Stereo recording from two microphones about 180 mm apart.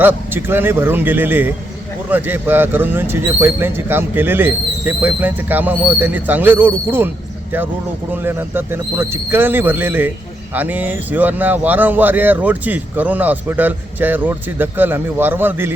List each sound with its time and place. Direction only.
0.0 s speech: 10° right (ahead or behind)
8.1 s speech: 10° right (ahead or behind)